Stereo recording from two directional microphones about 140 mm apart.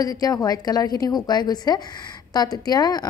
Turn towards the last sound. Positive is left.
turn(degrees=30)  # may be behind; listen again after turning